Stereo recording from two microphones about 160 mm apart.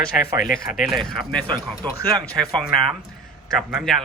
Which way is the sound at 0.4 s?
60° left (ahead or behind).